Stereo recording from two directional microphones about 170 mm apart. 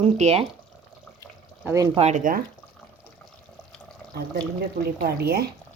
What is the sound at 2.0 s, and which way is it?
Speech, 45° right (ahead or behind).